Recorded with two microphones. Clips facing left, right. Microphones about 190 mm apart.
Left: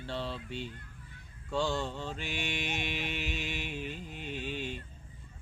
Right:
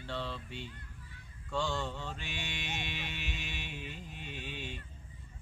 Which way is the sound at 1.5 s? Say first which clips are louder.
Left 3 dB; 30° left (ahead or behind).